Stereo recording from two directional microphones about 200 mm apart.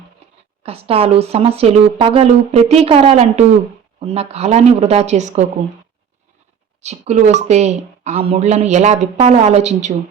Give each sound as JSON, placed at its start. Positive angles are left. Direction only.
{"t": 0.6, "sound": "a woman's voice", "side_deg": -30}
{"t": 6.8, "sound": "a woman's voice", "side_deg": -35}